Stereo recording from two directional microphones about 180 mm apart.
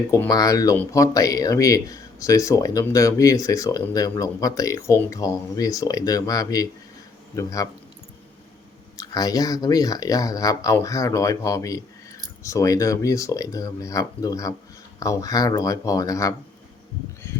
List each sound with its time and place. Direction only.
0.1 s speech: 20° left (ahead or behind)
9.0 s speech: 20° left (ahead or behind)